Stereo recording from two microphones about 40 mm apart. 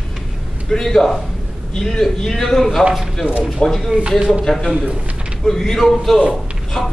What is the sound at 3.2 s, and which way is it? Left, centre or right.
Speech, right.